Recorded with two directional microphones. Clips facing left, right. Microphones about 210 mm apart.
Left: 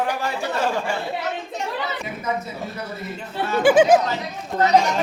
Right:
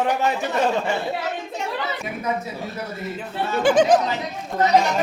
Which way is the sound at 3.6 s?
10° left (ahead or behind).